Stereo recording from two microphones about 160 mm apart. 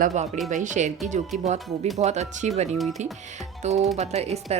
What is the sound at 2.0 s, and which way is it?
Speech, 45° right (ahead or behind).